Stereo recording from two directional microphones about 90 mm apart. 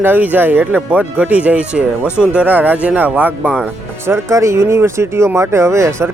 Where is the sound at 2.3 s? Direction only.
15° right (ahead or behind).